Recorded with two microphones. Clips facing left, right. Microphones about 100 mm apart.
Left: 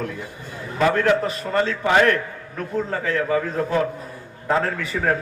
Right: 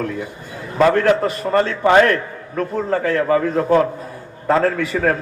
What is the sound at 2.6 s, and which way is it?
Speech, 55° right (ahead or behind).